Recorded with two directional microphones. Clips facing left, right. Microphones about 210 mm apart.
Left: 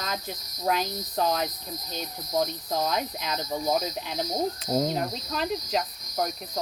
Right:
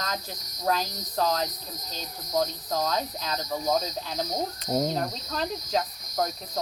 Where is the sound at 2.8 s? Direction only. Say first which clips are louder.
Even; 10° left (ahead or behind).